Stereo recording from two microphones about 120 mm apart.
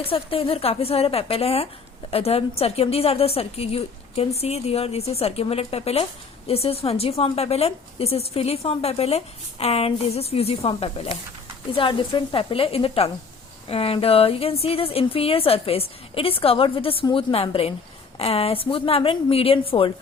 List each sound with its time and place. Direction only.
0.0 s a woman's voice: 50° left (ahead or behind)